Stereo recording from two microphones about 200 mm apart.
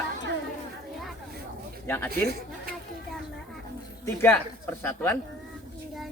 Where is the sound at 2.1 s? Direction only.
50° right (ahead or behind).